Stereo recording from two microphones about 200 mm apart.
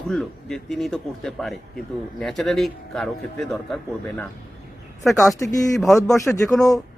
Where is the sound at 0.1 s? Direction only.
Centre (ahead or behind).